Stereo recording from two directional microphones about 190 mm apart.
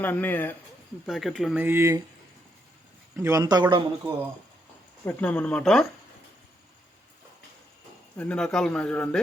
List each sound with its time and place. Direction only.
0.0 s speech: 10° left (ahead or behind)
1.0 s speech: centre (ahead or behind)
1.6 s speech: 10° right (ahead or behind)
3.2 s speech: 15° right (ahead or behind)
5.0 s speech: 10° left (ahead or behind)
8.2 s speech: 5° left (ahead or behind)